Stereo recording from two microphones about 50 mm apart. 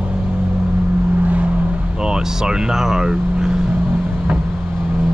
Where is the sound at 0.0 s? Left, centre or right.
Right.